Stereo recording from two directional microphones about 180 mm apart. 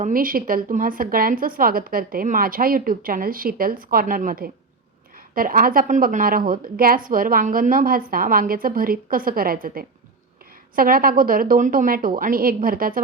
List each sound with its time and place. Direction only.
0.0 s a woman's voice: 50° right (ahead or behind)